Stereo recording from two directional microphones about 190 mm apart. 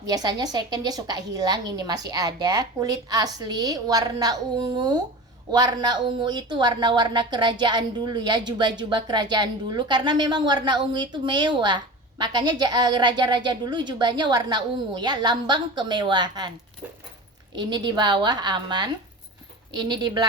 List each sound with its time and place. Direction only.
0.1 s speech: 20° right (ahead or behind)
17.5 s speech: 20° right (ahead or behind)